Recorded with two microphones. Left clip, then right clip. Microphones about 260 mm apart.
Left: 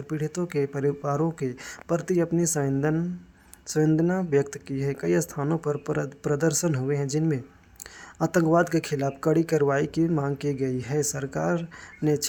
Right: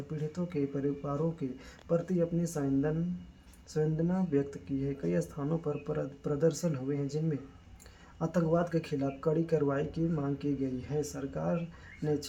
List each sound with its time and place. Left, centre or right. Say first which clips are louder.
0.1 s speech: left 9 dB; left